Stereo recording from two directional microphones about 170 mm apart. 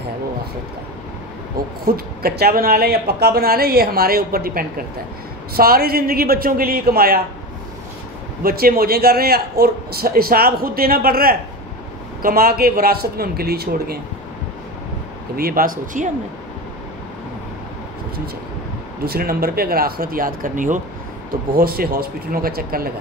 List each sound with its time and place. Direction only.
1.9 s a man's voice: 65° right (ahead or behind)
8.4 s a man's voice: 60° right (ahead or behind)
15.3 s a man's voice: 60° right (ahead or behind)
19.0 s a man's voice: 65° right (ahead or behind)
21.3 s a man's voice: 60° right (ahead or behind)